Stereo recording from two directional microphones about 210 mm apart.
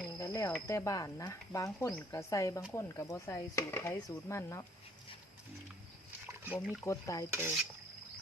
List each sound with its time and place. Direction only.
0.2 s cricket: 15° left (ahead or behind)
0.7 s speech: 15° left (ahead or behind)
6.2 s a sound: 10° right (ahead or behind)
6.8 s speech: 15° left (ahead or behind)